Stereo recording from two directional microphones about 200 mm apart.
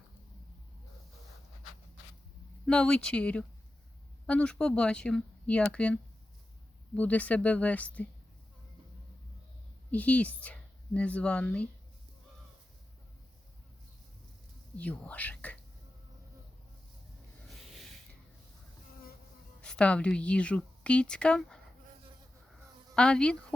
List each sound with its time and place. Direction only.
2.6 s a woman's voice: 5° left (ahead or behind)
9.9 s speech: 5° left (ahead or behind)
14.8 s speech: 5° left (ahead or behind)
19.6 s a woman's voice: 5° left (ahead or behind)
23.0 s a woman's voice: 5° left (ahead or behind)